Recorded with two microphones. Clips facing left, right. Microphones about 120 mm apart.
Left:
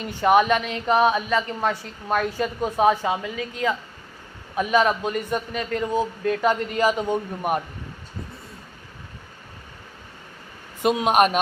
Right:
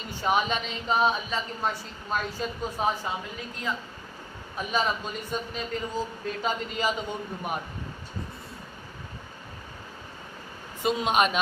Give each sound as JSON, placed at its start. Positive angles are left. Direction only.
{"t": 0.0, "sound": "a woman's voice", "side_deg": 65}
{"t": 4.5, "sound": "a woman's voice", "side_deg": 65}
{"t": 10.8, "sound": "a woman's voice", "side_deg": 60}